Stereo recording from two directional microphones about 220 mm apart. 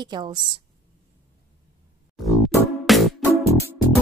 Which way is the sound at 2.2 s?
Centre (ahead or behind).